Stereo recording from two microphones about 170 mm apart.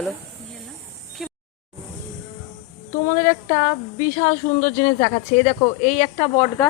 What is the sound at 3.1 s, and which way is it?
A woman's voice, 55° left (ahead or behind).